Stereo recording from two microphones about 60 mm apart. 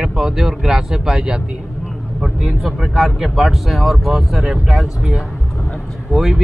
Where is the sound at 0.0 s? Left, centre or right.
Centre.